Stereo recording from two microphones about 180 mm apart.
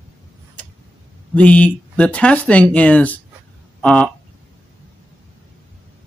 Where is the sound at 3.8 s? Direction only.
5° left (ahead or behind).